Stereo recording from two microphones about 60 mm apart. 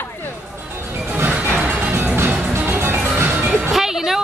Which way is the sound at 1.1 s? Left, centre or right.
Right.